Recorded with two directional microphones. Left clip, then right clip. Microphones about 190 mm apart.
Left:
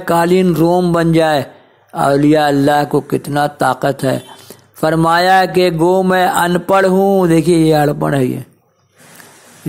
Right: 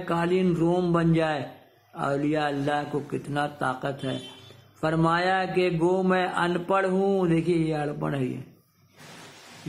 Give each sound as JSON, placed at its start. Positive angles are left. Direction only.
{"t": 0.0, "sound": "speech", "side_deg": 45}
{"t": 0.9, "sound": "mantra", "side_deg": 45}
{"t": 2.0, "sound": "speech", "side_deg": 40}
{"t": 4.7, "sound": "mantra", "side_deg": 40}